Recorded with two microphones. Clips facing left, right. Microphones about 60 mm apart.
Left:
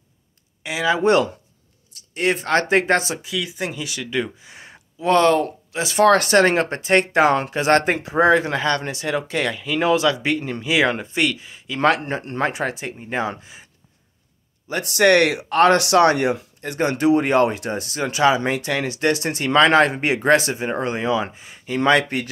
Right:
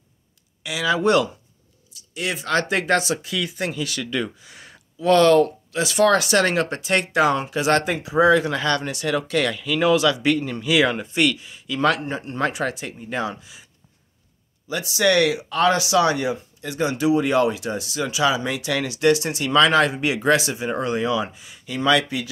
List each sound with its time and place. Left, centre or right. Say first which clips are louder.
0.7 s speech: left 2 dB; left
2.0 s speech: left 6 dB; left
3.3 s speech: even; centre
6.0 s speech: left 4 dB; left
6.4 s speech: left 3 dB; left
12.0 s speech: left 1 dB; left
14.7 s speech: left 4 dB; left